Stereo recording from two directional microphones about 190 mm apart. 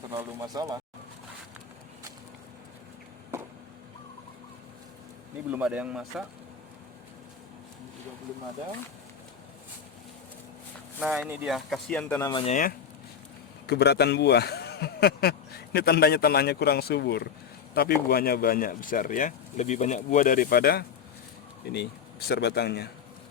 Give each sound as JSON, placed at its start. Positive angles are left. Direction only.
{"t": 0.2, "sound": "speech", "side_deg": -15}
{"t": 5.5, "sound": "speech", "side_deg": -5}
{"t": 11.0, "sound": "speech", "side_deg": -5}
{"t": 12.3, "sound": "speech", "side_deg": 30}
{"t": 13.7, "sound": "a man's voice", "side_deg": 60}